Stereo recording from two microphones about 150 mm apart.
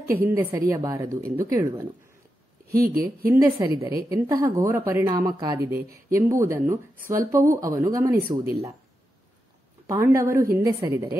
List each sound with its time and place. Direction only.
0.3 s a woman's voice: 20° right (ahead or behind)
2.7 s speech: 75° right (ahead or behind)
3.3 s a woman's voice: 20° right (ahead or behind)
8.2 s speech: 80° right
9.8 s a woman's voice: 20° right (ahead or behind)